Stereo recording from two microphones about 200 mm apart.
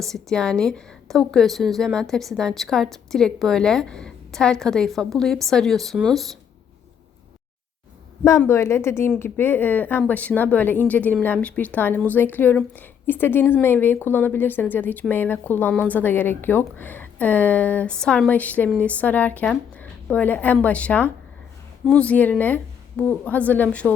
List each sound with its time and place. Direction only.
0.0 s a woman's voice: centre (ahead or behind)
8.4 s speech: 15° left (ahead or behind)